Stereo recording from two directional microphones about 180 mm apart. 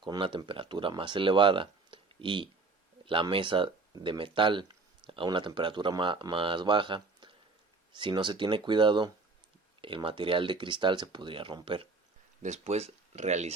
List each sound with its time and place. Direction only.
0.0 s speech: 25° right (ahead or behind)
12.4 s speech: 40° right (ahead or behind)